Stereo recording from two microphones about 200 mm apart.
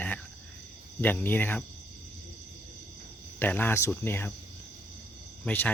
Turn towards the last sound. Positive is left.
turn(degrees=10)  # may be behind; listen again after turning